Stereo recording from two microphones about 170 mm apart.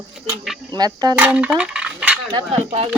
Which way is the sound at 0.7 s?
25° right (ahead or behind).